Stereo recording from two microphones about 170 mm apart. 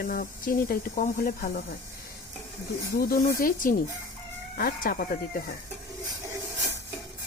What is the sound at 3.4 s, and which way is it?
Speech, 55° left (ahead or behind).